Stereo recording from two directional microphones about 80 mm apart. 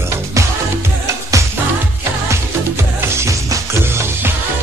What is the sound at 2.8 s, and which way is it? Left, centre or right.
Music, right.